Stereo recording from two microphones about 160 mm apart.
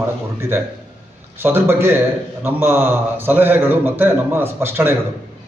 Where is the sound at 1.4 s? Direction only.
15° right (ahead or behind).